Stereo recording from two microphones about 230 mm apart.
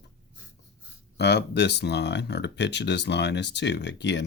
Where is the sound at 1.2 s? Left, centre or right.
Left.